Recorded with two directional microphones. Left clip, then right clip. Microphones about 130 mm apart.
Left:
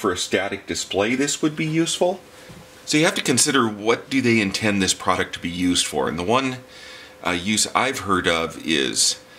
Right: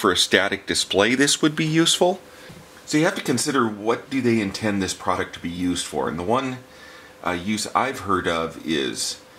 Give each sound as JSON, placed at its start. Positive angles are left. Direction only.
{"t": 0.0, "sound": "speech", "side_deg": -50}
{"t": 2.9, "sound": "speech", "side_deg": 15}